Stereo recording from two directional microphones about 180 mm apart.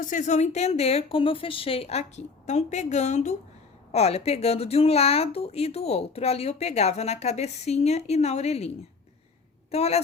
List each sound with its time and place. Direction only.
0.0 s speech: 45° left (ahead or behind)
9.7 s speech: 35° left (ahead or behind)